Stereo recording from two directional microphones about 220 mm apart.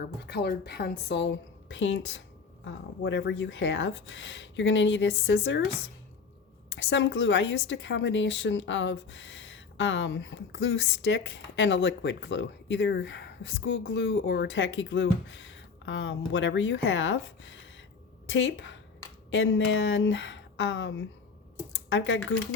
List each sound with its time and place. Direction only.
0.0 s a woman's voice: 50° left (ahead or behind)
6.7 s a woman's voice: 60° left (ahead or behind)